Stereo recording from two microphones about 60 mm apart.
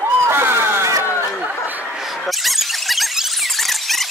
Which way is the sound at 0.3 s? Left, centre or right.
Right.